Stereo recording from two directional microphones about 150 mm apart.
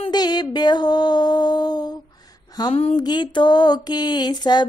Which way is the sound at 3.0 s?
30° left (ahead or behind).